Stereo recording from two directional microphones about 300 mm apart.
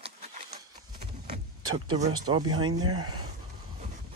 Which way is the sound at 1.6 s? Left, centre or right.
Right.